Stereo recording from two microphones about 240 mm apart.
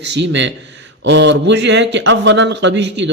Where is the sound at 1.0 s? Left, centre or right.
Right.